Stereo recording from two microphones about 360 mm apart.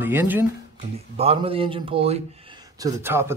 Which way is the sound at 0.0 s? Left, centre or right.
Centre.